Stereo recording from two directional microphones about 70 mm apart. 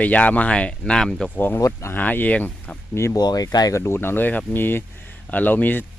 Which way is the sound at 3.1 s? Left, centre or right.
Left.